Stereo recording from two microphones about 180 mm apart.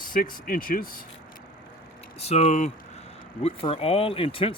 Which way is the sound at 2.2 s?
35° left (ahead or behind).